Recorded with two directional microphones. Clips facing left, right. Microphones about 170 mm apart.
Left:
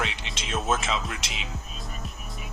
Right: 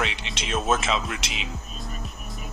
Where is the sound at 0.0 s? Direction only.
85° right.